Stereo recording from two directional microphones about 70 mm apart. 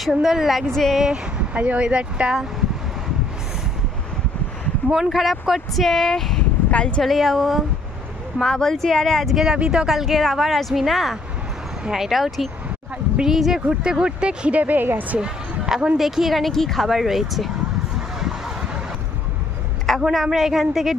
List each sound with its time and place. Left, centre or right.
0.0 s speech: centre
0.9 s speech: centre
4.9 s speech: centre
6.7 s speech: centre
7.0 s speech: centre; by 15.1 s right
15.1 s a sound: centre
16.0 s speech: centre
17.9 s vehicle: centre
20.0 s speech: centre